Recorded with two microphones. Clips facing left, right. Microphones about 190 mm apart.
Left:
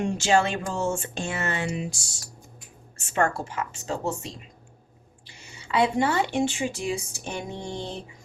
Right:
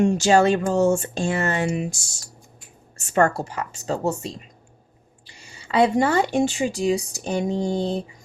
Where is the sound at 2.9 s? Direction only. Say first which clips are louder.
Right 5 dB; 40° right (ahead or behind).